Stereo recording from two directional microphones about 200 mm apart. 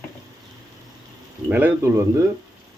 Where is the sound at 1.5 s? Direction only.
10° right (ahead or behind).